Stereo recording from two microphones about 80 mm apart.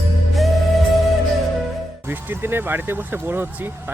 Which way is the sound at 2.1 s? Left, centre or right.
Right.